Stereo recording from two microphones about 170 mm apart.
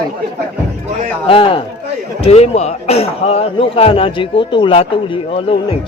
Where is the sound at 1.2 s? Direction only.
30° left (ahead or behind).